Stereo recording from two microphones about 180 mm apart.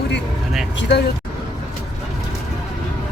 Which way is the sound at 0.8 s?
70° left (ahead or behind).